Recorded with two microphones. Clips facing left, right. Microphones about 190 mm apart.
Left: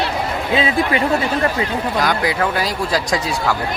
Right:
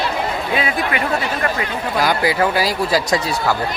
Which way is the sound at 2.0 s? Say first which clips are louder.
Right 3 dB; 5° right (ahead or behind).